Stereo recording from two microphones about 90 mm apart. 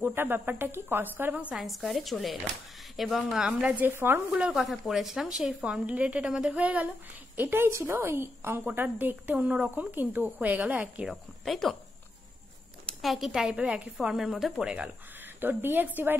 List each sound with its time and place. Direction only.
0.0 s a woman's voice: 25° right (ahead or behind)
1.6 s a woman's voice: centre (ahead or behind)
3.8 s a woman's voice: 25° right (ahead or behind)
4.4 s a woman's voice: 5° right (ahead or behind)
11.1 s speech: centre (ahead or behind)
13.0 s speech: centre (ahead or behind)
15.4 s a woman's voice: 20° right (ahead or behind)